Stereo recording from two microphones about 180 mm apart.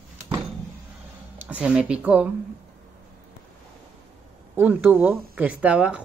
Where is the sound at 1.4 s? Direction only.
10° right (ahead or behind).